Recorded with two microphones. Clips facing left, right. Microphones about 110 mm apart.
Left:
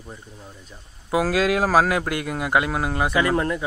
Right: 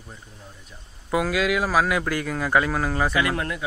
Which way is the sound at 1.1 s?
35° left (ahead or behind).